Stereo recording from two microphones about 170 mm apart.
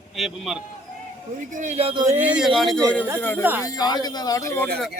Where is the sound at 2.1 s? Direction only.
10° right (ahead or behind).